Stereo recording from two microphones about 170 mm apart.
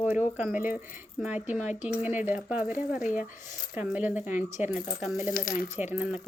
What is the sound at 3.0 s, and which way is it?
Speech, 50° left (ahead or behind).